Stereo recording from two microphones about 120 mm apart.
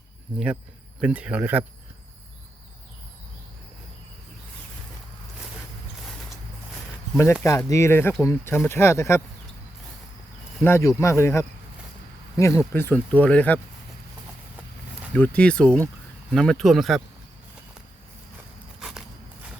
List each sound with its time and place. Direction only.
1.0 s speech: 10° right (ahead or behind)
7.4 s speech: 25° left (ahead or behind)
10.6 s speech: 20° left (ahead or behind)
15.1 s speech: 10° left (ahead or behind)
18.8 s a sound: 5° right (ahead or behind)